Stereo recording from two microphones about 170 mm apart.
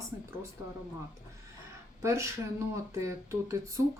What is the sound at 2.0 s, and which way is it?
A woman's voice, 20° right (ahead or behind).